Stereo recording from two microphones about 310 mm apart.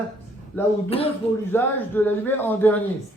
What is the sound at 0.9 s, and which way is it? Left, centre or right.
Speech, centre.